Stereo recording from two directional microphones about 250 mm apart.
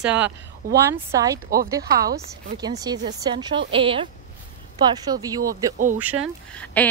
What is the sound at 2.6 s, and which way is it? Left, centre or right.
A woman's voice, centre.